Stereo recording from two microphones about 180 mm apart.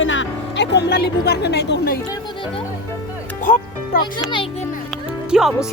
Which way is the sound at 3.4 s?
45° left (ahead or behind).